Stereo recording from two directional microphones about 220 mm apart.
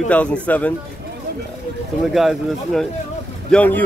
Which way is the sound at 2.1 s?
Centre (ahead or behind).